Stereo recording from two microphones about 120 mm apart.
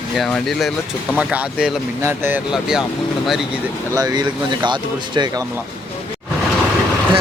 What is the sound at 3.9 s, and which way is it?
Speech, 30° right (ahead or behind).